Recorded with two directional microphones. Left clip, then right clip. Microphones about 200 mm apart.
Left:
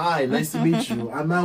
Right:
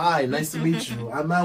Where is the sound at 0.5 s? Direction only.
20° left (ahead or behind).